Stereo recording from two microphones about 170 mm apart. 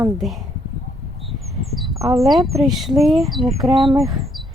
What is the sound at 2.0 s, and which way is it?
Speech, 20° right (ahead or behind).